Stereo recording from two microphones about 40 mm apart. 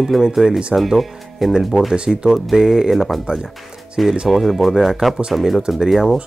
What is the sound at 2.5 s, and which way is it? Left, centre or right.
Speech, centre.